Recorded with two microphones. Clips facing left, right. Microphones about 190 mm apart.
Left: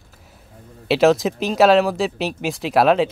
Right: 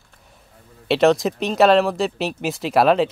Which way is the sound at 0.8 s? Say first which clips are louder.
Left 1 dB; centre (ahead or behind).